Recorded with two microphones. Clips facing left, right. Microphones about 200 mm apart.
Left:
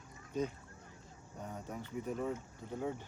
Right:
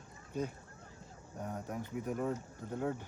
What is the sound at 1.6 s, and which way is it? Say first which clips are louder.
Speech: even; 10° right (ahead or behind).